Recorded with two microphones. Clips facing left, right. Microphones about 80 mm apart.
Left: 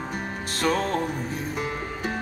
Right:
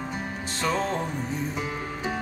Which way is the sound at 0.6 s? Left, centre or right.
Left.